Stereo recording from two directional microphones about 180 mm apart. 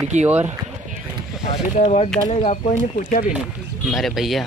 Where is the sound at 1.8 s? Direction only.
35° left (ahead or behind).